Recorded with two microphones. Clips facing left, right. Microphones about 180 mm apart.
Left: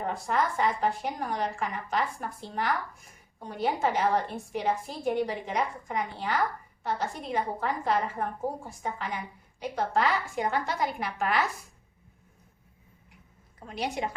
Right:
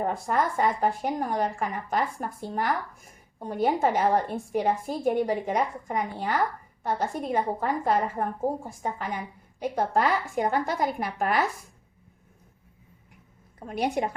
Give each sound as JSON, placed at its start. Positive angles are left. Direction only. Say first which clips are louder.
{"t": 0.0, "sound": "a woman's voice", "louder": "right 3 dB", "side_deg": -45}
{"t": 13.7, "sound": "a woman's voice", "louder": "right 5 dB", "side_deg": -50}